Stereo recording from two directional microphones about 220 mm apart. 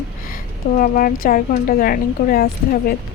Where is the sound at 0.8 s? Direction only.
40° left (ahead or behind).